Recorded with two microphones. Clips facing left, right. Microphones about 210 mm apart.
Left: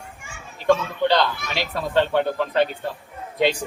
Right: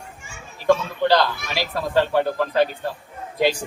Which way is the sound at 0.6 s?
Centre (ahead or behind).